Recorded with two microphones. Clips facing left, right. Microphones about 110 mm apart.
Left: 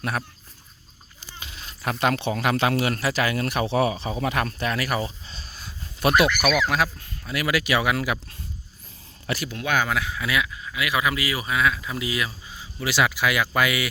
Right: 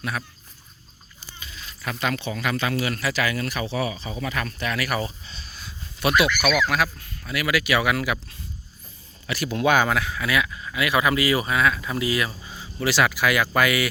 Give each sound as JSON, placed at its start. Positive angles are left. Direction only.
{"t": 1.5, "sound": "speech", "side_deg": 50}
{"t": 3.0, "sound": "speech", "side_deg": 45}
{"t": 5.2, "sound": "a sound", "side_deg": 40}
{"t": 6.6, "sound": "speech", "side_deg": 25}
{"t": 9.4, "sound": "speech", "side_deg": -5}
{"t": 9.9, "sound": "speech", "side_deg": 15}
{"t": 10.5, "sound": "speech", "side_deg": 5}